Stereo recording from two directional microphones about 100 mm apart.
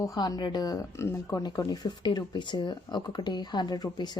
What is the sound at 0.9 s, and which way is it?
Speech, 30° left (ahead or behind).